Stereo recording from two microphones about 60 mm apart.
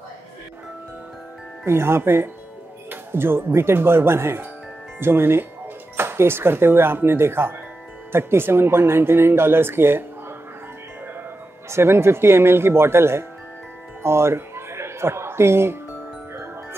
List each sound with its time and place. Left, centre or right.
1.6 s speech: right
11.7 s speech: right